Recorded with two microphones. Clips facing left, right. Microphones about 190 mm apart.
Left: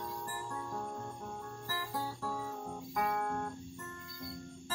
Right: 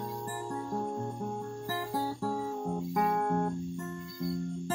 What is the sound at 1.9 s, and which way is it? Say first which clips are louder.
Guitar: right 6 dB; 30° right (ahead or behind).